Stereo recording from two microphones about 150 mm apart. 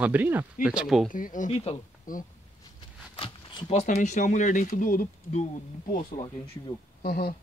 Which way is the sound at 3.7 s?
50° left (ahead or behind).